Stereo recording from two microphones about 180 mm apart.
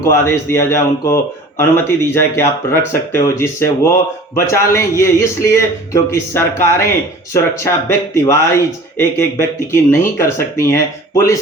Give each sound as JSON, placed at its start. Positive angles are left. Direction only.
{"t": 0.0, "sound": "a man's voice", "side_deg": 15}